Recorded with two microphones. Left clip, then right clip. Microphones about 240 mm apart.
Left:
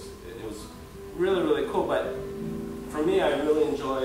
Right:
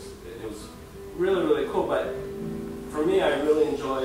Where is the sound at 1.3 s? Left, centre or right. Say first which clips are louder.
Right 2 dB; right.